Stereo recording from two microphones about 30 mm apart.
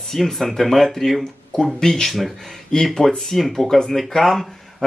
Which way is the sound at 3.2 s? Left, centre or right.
Centre.